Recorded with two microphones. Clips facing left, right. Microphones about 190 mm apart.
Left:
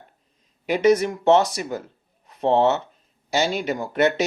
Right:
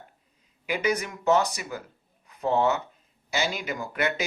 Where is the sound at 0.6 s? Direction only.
35° left (ahead or behind).